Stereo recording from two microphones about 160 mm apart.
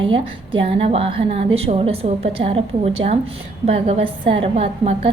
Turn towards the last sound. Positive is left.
turn(degrees=-35)  # may be behind; listen again after turning